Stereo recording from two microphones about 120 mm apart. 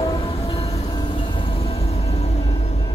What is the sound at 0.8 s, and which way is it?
Train, 40° left (ahead or behind).